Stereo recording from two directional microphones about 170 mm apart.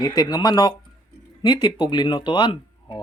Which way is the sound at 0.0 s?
25° left (ahead or behind).